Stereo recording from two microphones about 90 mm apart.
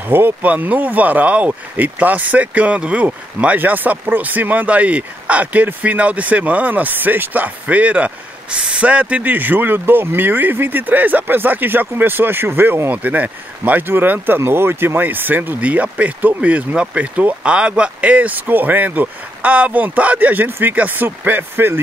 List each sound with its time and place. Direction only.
0.1 s speech: 20° right (ahead or behind)